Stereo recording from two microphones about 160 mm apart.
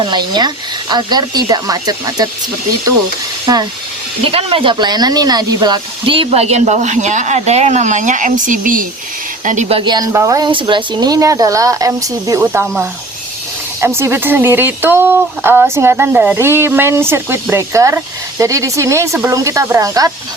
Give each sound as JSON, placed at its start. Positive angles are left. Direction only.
{"t": 0.0, "sound": "a woman's voice", "side_deg": -30}
{"t": 3.4, "sound": "speech", "side_deg": -25}
{"t": 4.2, "sound": "a woman's voice", "side_deg": -35}
{"t": 13.8, "sound": "a woman's voice", "side_deg": -15}